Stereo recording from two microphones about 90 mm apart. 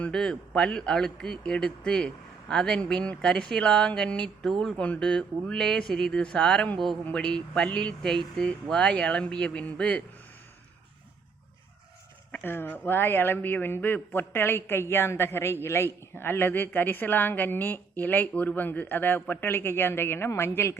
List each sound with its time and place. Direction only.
0.0 s a man's voice: 5° left (ahead or behind)
12.3 s a woman's voice: 20° left (ahead or behind)